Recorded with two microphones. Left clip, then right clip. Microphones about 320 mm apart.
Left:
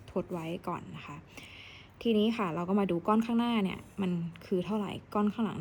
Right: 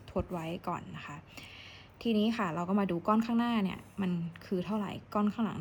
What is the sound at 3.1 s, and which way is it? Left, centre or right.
Speech, right.